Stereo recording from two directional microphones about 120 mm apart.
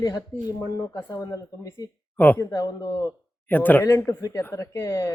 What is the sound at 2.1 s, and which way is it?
A man's voice, 20° left (ahead or behind).